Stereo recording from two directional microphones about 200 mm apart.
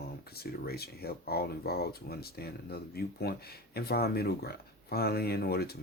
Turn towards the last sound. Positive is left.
turn(degrees=50)  # may be behind; listen again after turning